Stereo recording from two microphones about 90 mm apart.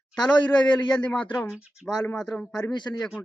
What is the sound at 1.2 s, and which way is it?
Speech, 15° left (ahead or behind).